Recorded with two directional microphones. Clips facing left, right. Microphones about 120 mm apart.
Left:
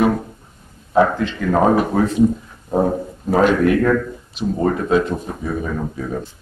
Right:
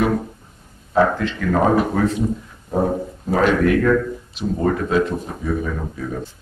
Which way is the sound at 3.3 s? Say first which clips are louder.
Left 2 dB; 25° left (ahead or behind).